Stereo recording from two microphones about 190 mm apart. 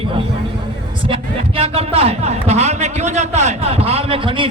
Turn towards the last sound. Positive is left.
turn(degrees=-25)  # may be behind; listen again after turning